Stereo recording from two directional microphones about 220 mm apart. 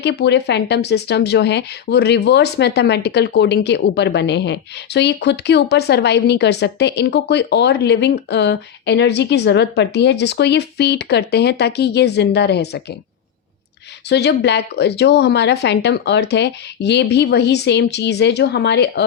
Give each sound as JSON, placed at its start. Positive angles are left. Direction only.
{"t": 0.0, "sound": "speech", "side_deg": 50}
{"t": 14.1, "sound": "speech", "side_deg": 50}